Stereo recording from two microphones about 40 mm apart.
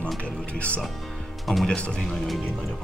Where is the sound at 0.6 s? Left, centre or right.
Left.